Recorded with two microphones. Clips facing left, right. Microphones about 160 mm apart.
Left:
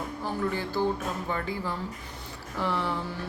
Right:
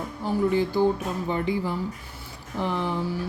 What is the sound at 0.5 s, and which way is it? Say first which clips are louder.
Speech: right 6 dB; 15° right (ahead or behind).